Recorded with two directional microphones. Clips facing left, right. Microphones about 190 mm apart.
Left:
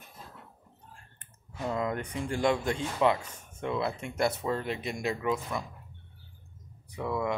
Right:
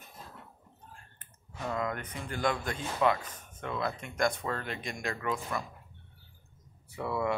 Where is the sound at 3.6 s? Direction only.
25° left (ahead or behind).